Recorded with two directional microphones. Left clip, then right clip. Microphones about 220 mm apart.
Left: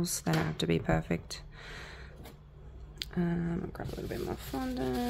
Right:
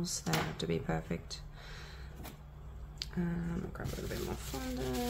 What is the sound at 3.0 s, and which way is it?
Speech, 35° left (ahead or behind).